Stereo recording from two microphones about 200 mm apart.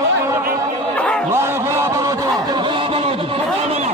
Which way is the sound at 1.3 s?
15° right (ahead or behind).